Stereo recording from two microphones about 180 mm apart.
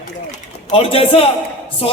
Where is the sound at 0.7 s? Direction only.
35° left (ahead or behind).